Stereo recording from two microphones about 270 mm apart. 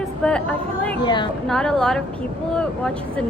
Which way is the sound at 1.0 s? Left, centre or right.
Centre.